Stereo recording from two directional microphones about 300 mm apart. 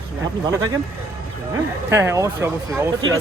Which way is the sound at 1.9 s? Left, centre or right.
Centre.